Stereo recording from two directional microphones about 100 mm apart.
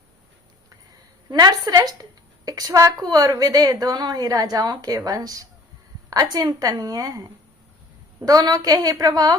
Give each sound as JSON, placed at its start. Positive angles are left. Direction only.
{"t": 1.3, "sound": "a woman's voice", "side_deg": -40}